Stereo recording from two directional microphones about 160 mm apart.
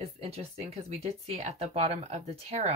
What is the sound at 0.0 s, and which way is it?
Speech, 40° right (ahead or behind).